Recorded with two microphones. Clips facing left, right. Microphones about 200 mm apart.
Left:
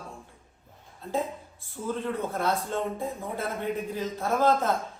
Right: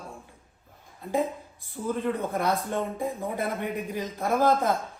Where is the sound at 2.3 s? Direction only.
15° right (ahead or behind).